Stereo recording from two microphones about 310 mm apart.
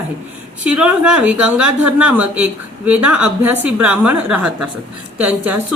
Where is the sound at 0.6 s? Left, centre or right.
Centre.